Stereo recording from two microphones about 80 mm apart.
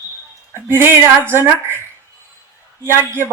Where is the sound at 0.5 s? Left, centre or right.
Right.